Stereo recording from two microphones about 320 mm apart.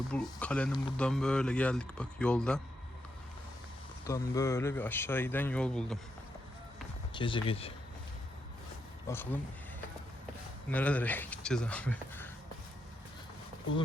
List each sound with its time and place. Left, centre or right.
0.1 s speech: centre
4.0 s speech: centre
7.1 s speech: centre
9.0 s speech: centre
10.7 s speech: centre